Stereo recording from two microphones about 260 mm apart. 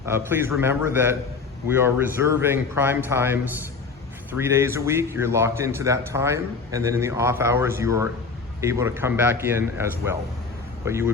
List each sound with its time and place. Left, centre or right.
0.0 s a man's voice: centre